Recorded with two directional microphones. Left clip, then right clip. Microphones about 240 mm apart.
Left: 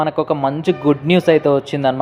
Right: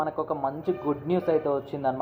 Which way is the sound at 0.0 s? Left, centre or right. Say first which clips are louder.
Left 11 dB; left.